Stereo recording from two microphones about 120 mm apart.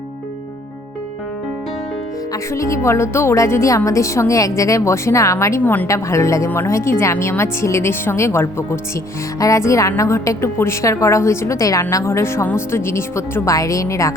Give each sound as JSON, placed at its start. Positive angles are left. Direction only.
{"t": 2.3, "sound": "speech", "side_deg": 25}